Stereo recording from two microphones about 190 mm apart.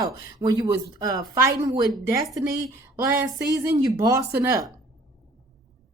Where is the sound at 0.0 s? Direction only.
20° right (ahead or behind).